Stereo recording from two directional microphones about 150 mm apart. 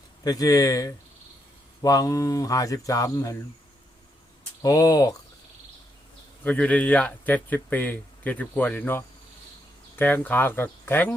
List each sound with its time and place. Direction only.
0.3 s speech: 25° left (ahead or behind)
4.6 s speech: 25° left (ahead or behind)
6.4 s speech: 10° left (ahead or behind)